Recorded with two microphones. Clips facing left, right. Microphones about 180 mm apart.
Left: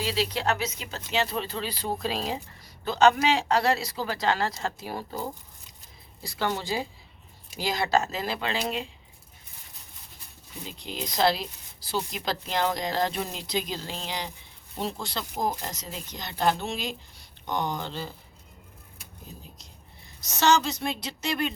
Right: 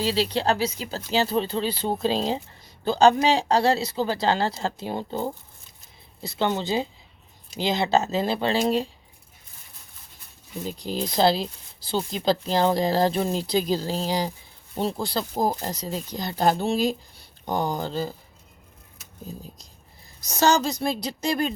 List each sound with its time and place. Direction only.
0.0 s speech: 30° right (ahead or behind)
10.7 s speech: 35° right (ahead or behind)
20.2 s speech: 35° right (ahead or behind)